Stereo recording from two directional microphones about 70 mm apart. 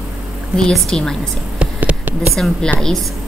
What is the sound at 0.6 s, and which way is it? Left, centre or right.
Speech, centre.